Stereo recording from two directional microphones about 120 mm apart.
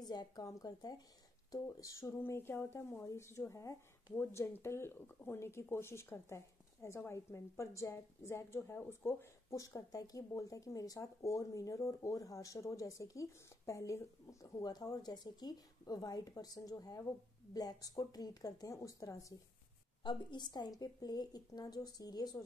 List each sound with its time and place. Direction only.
0.0 s a woman's voice: 35° left (ahead or behind)
20.0 s a woman's voice: 40° left (ahead or behind)